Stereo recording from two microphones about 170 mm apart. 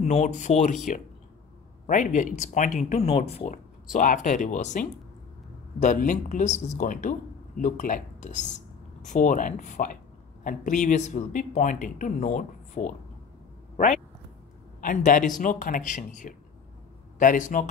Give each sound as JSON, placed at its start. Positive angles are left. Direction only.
{"t": 0.0, "sound": "speech", "side_deg": 45}
{"t": 1.9, "sound": "speech", "side_deg": 50}
{"t": 14.8, "sound": "speech", "side_deg": 50}